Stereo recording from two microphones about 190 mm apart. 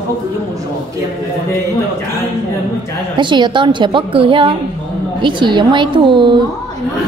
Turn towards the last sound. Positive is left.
turn(degrees=-25)  # may be behind; listen again after turning